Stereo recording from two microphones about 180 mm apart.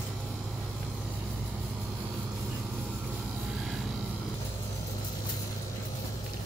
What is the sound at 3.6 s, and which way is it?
Helicopter, centre (ahead or behind).